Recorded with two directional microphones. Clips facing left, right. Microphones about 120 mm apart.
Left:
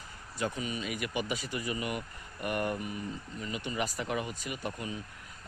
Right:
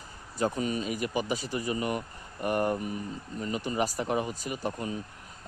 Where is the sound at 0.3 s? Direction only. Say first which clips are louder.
Right 6 dB; 35° right (ahead or behind).